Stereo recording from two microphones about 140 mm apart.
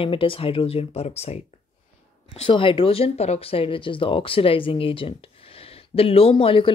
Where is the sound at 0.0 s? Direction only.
40° left (ahead or behind).